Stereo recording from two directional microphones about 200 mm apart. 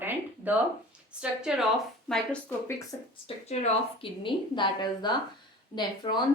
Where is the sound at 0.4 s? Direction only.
5° right (ahead or behind).